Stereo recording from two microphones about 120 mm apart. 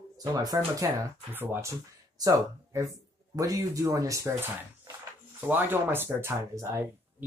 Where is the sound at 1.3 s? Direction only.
20° right (ahead or behind).